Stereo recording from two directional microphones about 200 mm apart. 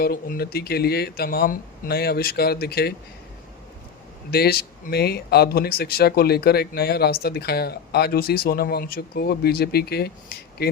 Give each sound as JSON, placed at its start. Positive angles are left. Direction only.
{"t": 0.0, "sound": "speech", "side_deg": 50}
{"t": 4.3, "sound": "speech", "side_deg": 50}